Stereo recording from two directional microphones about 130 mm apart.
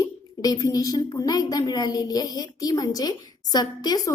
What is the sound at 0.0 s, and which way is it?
A woman's voice, 30° left (ahead or behind).